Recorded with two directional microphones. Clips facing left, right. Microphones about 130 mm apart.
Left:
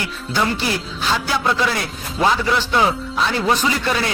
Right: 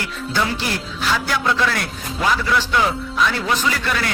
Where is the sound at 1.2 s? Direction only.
15° left (ahead or behind).